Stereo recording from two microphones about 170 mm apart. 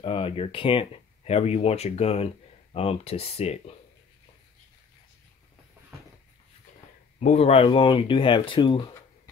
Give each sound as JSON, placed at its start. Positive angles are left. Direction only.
{"t": 0.0, "sound": "speech", "side_deg": 35}
{"t": 7.2, "sound": "speech", "side_deg": 40}